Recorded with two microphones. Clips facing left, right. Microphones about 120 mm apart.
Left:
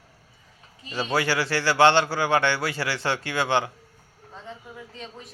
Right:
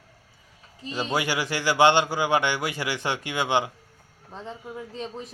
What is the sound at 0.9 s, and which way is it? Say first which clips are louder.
A man's voice: left 1 dB; 15° right (ahead or behind).